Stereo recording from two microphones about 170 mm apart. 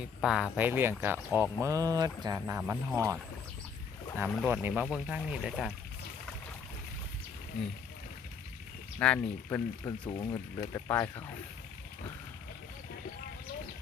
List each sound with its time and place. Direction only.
0.2 s speech: 5° right (ahead or behind)
4.3 s speech: centre (ahead or behind)
9.0 s speech: 10° left (ahead or behind)